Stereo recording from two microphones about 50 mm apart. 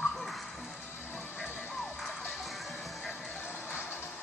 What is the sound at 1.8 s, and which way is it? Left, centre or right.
Music, centre.